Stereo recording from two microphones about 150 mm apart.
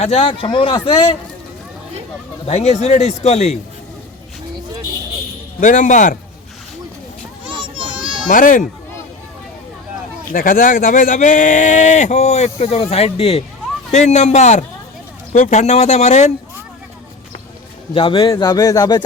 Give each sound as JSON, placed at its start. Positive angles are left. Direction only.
{"t": 0.0, "sound": "speech", "side_deg": 40}
{"t": 2.5, "sound": "speech", "side_deg": 45}
{"t": 5.5, "sound": "speech", "side_deg": 60}
{"t": 7.5, "sound": "children playing", "side_deg": -35}
{"t": 8.3, "sound": "speech", "side_deg": 60}
{"t": 10.3, "sound": "speech", "side_deg": 65}
{"t": 13.9, "sound": "speech", "side_deg": 50}
{"t": 17.9, "sound": "speech", "side_deg": 35}
{"t": 18.2, "sound": "speech", "side_deg": 25}